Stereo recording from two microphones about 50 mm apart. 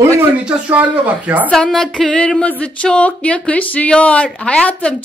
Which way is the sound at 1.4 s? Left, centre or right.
Centre.